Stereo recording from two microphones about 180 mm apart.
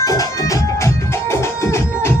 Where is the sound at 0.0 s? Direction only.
20° left (ahead or behind).